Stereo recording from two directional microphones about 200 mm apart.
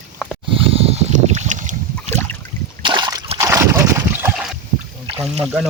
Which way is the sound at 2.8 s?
20° right (ahead or behind).